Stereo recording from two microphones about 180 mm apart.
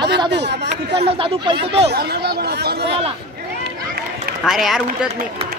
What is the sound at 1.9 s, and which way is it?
Speech, 60° right (ahead or behind).